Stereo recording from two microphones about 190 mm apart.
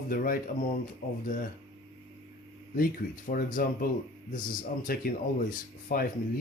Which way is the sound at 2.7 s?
50° left (ahead or behind).